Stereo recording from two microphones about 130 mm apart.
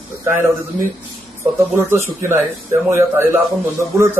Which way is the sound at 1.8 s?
20° right (ahead or behind).